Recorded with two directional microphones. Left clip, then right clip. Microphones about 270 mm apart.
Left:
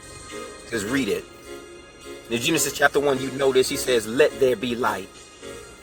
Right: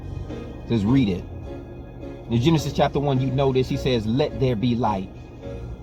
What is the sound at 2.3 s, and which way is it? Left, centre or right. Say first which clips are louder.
Speech: even; centre.